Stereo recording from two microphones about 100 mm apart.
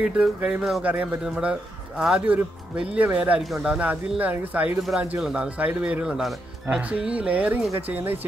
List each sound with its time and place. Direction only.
0.0 s a man's voice: 10° right (ahead or behind)